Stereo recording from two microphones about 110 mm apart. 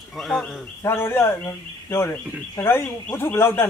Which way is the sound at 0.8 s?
20° left (ahead or behind).